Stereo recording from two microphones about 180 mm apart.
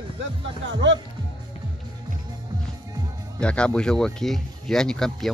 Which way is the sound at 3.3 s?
5° left (ahead or behind).